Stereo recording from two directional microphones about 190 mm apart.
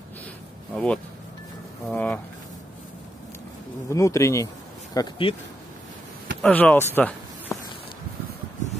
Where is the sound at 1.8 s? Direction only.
10° left (ahead or behind).